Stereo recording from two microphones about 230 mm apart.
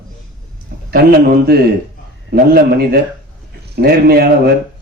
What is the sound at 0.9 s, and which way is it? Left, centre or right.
Speech, right.